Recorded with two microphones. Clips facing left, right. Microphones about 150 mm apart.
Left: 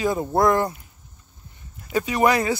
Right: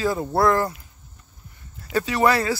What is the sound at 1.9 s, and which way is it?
Speech, 15° left (ahead or behind).